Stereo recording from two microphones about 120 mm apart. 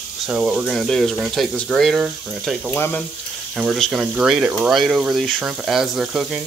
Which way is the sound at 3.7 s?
Centre (ahead or behind).